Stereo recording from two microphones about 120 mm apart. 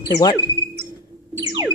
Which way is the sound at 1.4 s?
30° right (ahead or behind).